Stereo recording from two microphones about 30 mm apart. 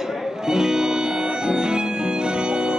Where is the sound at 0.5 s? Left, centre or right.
Right.